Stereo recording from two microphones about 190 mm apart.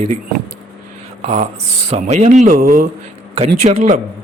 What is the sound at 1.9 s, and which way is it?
Speech, 35° right (ahead or behind).